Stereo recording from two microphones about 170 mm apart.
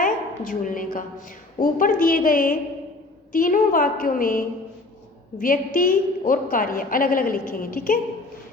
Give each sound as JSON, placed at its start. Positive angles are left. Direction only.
{"t": 0.0, "sound": "a woman's voice", "side_deg": 50}